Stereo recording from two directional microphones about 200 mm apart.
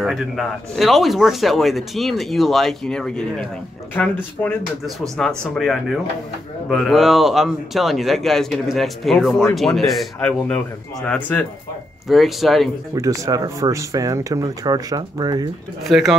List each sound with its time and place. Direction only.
0.0 s speech: centre (ahead or behind)
9.3 s speech: 15° left (ahead or behind)
9.6 s speech: centre (ahead or behind)
12.9 s speech: 15° right (ahead or behind)
15.8 s speech: centre (ahead or behind)